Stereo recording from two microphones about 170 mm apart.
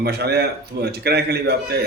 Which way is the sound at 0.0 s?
75° right (ahead or behind).